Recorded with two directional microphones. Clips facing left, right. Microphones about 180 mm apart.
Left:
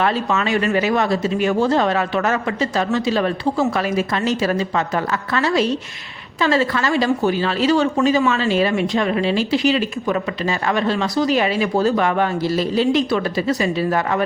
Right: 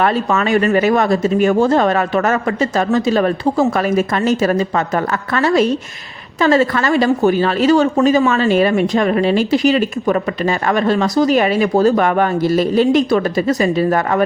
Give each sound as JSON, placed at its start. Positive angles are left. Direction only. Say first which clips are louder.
{"t": 0.0, "sound": "speech", "louder": "right 4 dB", "side_deg": -50}